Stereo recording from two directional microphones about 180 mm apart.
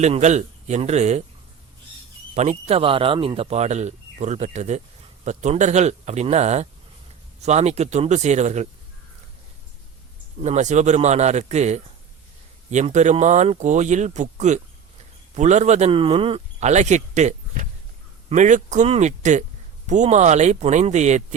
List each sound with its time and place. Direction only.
0.0 s speech: 40° right (ahead or behind)
2.3 s speech: 40° right (ahead or behind)
10.4 s speech: 40° right (ahead or behind)